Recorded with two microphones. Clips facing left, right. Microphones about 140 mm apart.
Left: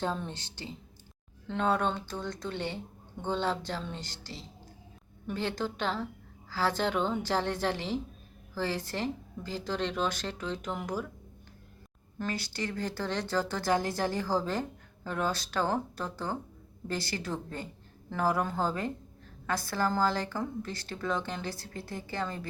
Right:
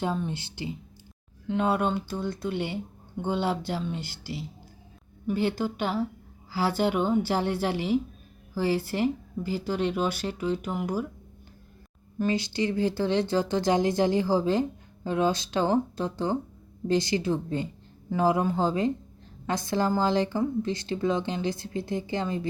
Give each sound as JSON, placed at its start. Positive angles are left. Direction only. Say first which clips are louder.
{"t": 0.2, "sound": "speech", "louder": "right 7 dB", "side_deg": -10}
{"t": 12.2, "sound": "a woman's voice", "louder": "right 8 dB", "side_deg": -15}